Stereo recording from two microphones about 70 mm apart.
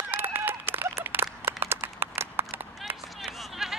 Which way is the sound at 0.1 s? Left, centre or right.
Right.